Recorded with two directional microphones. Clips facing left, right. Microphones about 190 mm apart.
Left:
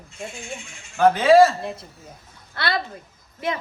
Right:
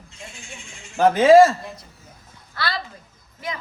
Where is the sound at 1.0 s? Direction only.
40° right (ahead or behind).